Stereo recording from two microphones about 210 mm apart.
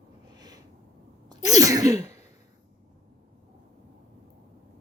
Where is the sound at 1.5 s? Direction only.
15° right (ahead or behind).